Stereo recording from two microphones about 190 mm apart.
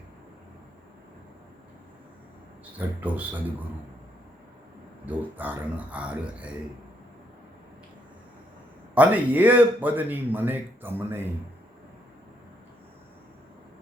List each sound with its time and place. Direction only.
2.7 s speech: 10° right (ahead or behind)
5.0 s speech: 10° right (ahead or behind)
9.0 s speech: 10° right (ahead or behind)